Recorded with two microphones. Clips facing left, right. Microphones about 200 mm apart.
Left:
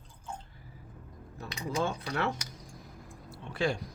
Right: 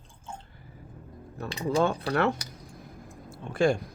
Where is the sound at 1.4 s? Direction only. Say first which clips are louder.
Right 7 dB; 60° right (ahead or behind).